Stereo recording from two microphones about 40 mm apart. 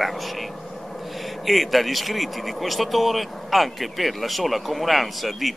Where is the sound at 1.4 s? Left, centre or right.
Centre.